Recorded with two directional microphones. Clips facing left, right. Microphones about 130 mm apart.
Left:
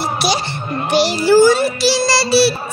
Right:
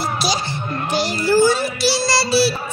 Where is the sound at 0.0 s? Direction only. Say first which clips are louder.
Left 3 dB; 65° left (ahead or behind).